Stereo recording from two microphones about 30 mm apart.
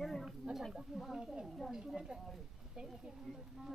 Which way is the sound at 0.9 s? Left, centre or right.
Centre.